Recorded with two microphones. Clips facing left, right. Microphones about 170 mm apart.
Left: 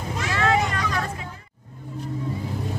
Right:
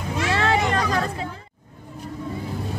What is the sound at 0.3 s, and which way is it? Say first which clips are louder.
Vehicle: right 1 dB; 30° right (ahead or behind).